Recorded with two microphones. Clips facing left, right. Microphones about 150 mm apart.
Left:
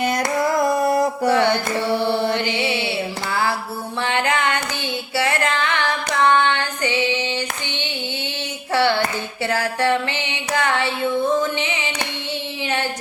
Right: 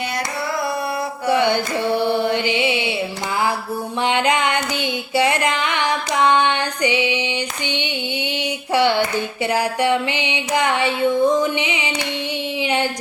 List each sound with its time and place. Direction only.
0.5 s mantra: 45° left (ahead or behind)
1.3 s mantra: 15° right (ahead or behind)
4.0 s music: 15° right (ahead or behind)
5.1 s female singing: 15° right (ahead or behind)
8.7 s hands: 15° right (ahead or behind)
9.1 s a sound: 15° right (ahead or behind)